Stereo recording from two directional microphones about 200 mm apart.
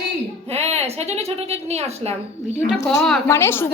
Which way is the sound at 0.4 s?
30° right (ahead or behind).